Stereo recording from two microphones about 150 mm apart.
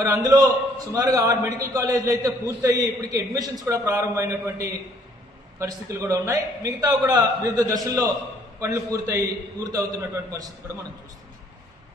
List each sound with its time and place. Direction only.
0.0 s a man's voice: 25° right (ahead or behind)